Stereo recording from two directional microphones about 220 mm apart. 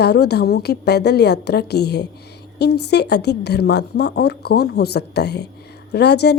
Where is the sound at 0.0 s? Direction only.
50° left (ahead or behind).